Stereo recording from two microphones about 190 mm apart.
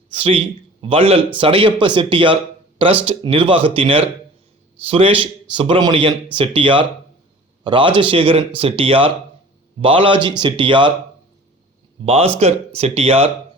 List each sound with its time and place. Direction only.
0.1 s a man's voice: 30° right (ahead or behind)
12.0 s speech: 30° right (ahead or behind)